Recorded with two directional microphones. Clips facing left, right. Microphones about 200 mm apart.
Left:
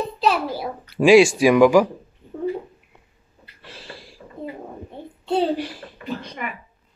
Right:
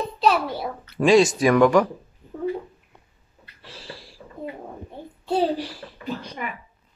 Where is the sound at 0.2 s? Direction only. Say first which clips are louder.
Right 1 dB; centre (ahead or behind).